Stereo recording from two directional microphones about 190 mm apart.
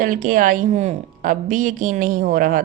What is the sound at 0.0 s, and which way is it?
A woman's voice, 45° right (ahead or behind).